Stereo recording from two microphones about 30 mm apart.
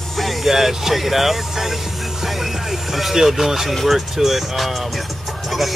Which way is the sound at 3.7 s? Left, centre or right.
Centre.